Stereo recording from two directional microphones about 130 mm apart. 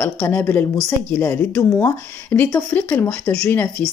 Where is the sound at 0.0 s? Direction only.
10° left (ahead or behind).